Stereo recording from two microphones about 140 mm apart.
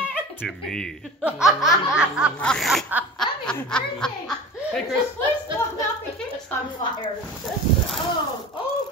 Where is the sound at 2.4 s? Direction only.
5° left (ahead or behind).